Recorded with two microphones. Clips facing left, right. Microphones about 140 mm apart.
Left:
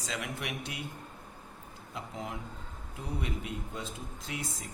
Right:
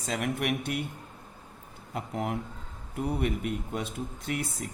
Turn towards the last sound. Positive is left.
turn(degrees=-65)  # may be behind; listen again after turning